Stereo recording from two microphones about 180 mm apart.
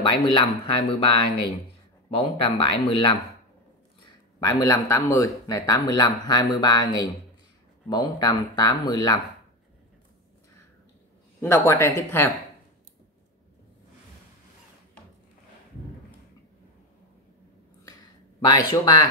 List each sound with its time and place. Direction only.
0.0 s speech: 30° left (ahead or behind)
4.4 s speech: 20° left (ahead or behind)
11.4 s speech: 15° left (ahead or behind)
18.5 s speech: 20° left (ahead or behind)